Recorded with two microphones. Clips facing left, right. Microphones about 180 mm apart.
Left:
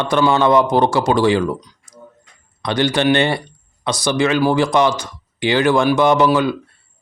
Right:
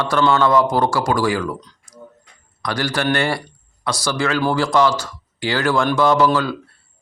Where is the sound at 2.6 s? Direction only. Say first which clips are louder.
Left 5 dB; 20° left (ahead or behind).